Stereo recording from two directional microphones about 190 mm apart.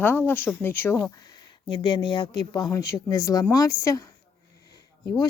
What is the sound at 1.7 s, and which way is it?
Speech, 25° left (ahead or behind).